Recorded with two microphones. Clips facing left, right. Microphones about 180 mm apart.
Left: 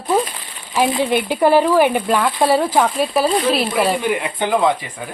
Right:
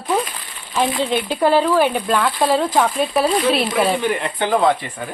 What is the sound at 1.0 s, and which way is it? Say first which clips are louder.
A woman's voice: left 2 dB; 10° left (ahead or behind).